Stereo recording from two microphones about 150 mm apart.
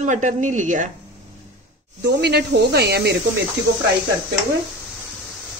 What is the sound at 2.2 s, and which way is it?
Speech, 90° right.